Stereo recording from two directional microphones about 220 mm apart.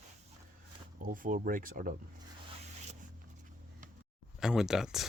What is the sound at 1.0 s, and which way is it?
Speech, 40° right (ahead or behind).